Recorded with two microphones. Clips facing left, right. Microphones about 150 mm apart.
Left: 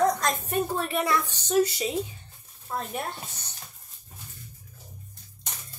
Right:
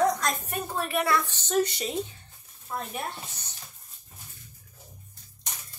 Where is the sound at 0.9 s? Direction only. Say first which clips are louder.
Right 2 dB; 15° left (ahead or behind).